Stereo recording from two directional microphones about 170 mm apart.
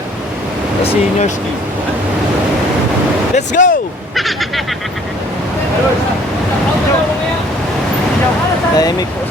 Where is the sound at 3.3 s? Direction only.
45° left (ahead or behind).